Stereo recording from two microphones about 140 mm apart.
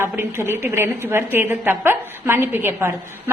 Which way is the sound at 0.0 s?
15° right (ahead or behind).